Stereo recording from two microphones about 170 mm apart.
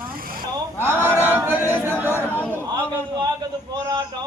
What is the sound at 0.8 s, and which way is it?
Speech, 15° right (ahead or behind).